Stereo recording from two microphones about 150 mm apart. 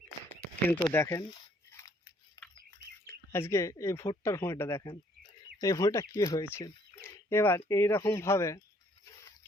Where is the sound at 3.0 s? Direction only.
15° left (ahead or behind).